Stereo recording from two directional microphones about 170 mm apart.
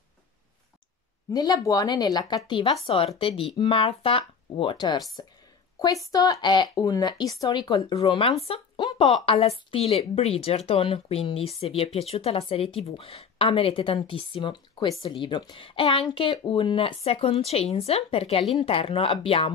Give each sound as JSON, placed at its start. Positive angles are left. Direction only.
{"t": 1.3, "sound": "a woman's voice", "side_deg": 20}